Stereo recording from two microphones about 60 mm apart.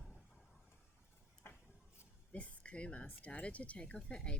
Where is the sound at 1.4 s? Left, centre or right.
Left.